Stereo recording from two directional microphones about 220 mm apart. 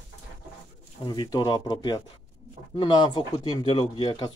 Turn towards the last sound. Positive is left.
turn(degrees=20)  # may be behind; listen again after turning